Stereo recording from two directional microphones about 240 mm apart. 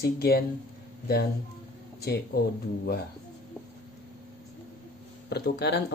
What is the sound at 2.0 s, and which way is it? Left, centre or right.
Speech, left.